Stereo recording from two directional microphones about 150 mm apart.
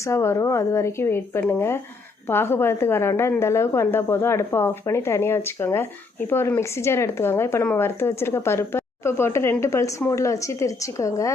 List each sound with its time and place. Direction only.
0.0 s a woman's voice: 20° left (ahead or behind)